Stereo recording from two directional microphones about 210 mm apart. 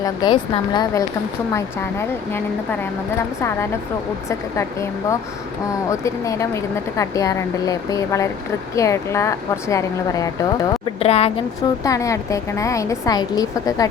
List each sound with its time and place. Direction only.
0.0 s speech: 20° left (ahead or behind)
4.3 s speech: 15° left (ahead or behind)
11.0 s speech: 30° left (ahead or behind)
11.8 s speech: 15° left (ahead or behind)